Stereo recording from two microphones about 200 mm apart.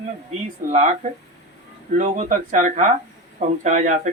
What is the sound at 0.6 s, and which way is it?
Speech, 35° right (ahead or behind).